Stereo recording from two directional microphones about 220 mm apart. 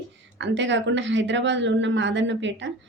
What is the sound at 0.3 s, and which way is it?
Speech, 55° right (ahead or behind).